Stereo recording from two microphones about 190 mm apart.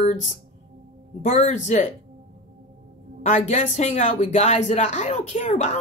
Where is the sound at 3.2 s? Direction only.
35° left (ahead or behind).